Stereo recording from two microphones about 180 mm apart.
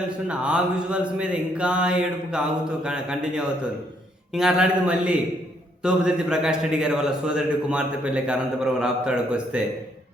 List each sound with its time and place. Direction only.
0.3 s a man's voice: 5° right (ahead or behind)